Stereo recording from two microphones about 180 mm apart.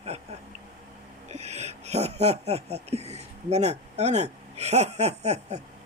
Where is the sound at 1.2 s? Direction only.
40° right (ahead or behind).